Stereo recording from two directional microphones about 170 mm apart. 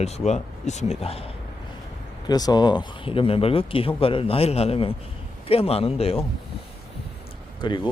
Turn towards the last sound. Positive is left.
turn(degrees=25)  # may be behind; listen again after turning